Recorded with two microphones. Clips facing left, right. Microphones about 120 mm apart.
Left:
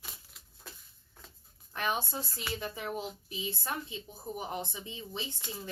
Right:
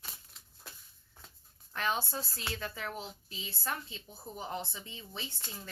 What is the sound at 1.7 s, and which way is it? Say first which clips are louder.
A woman's voice: left 1 dB; 15° left (ahead or behind).